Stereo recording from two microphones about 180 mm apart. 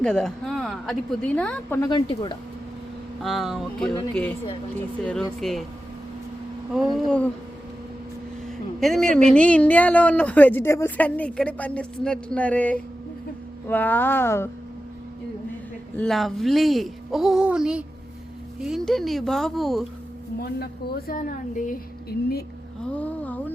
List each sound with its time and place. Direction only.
0.0 s speech: 5° left (ahead or behind)
1.8 s speech: 25° left (ahead or behind)
3.2 s speech: centre (ahead or behind)
5.4 s speech: centre (ahead or behind)
6.7 s speech: centre (ahead or behind)
8.8 s a woman's voice: centre (ahead or behind)
16.0 s speech: centre (ahead or behind)
20.4 s a woman's voice: 60° left (ahead or behind)
22.9 s a sound: 10° left (ahead or behind)